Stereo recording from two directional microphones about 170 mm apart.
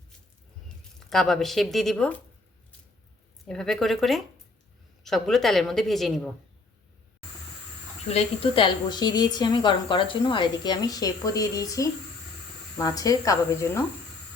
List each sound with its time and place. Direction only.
0.9 s speech: centre (ahead or behind)
3.4 s speech: 5° left (ahead or behind)
8.1 s a woman's voice: 30° left (ahead or behind); by 13.8 s 15° left (ahead or behind)